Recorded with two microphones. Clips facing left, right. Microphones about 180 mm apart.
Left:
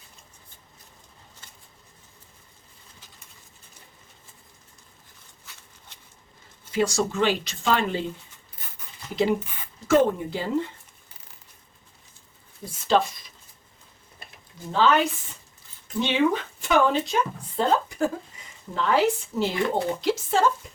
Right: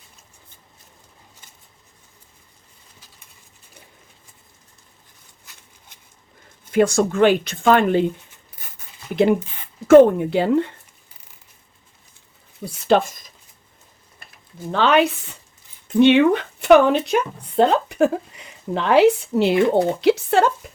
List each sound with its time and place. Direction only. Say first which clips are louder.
6.7 s speech: right 7 dB; 55° right (ahead or behind)
9.8 s speech: right 10 dB; 55° right (ahead or behind)
12.6 s speech: right 5 dB; 70° right (ahead or behind)
13.0 s speech: right 4 dB; 45° right (ahead or behind)
14.7 s speech: right 4 dB; 70° right (ahead or behind)